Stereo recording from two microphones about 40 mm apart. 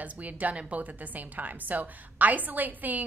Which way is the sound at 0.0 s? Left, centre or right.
Right.